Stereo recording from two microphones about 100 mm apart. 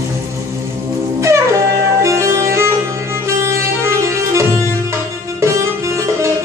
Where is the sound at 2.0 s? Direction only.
30° right (ahead or behind).